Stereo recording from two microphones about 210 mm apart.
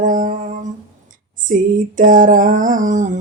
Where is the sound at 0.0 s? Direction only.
40° right (ahead or behind).